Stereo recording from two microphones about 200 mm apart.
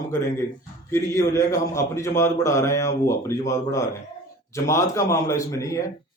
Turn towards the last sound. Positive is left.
turn(degrees=15)  # may be behind; listen again after turning